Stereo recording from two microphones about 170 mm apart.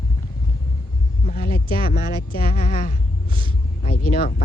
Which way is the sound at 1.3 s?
55° left (ahead or behind).